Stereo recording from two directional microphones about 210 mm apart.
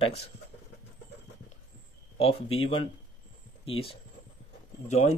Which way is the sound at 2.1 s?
30° left (ahead or behind).